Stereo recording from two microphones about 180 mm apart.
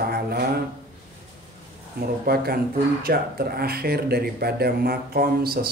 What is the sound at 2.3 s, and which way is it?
Speech, 60° right (ahead or behind).